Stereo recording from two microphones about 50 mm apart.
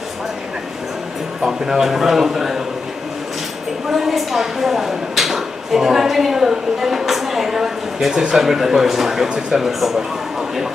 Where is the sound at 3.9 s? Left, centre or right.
Centre.